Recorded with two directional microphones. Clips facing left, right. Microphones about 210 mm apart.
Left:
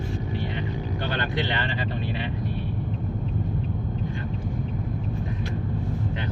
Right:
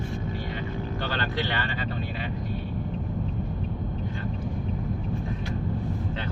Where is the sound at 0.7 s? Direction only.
15° left (ahead or behind).